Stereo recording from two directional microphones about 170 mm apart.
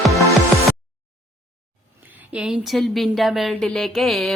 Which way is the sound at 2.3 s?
5° right (ahead or behind).